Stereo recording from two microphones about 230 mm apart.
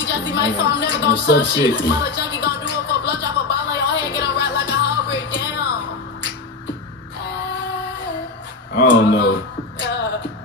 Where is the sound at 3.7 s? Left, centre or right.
Left.